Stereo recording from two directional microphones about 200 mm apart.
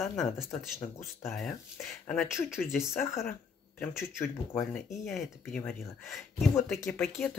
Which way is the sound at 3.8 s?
10° left (ahead or behind).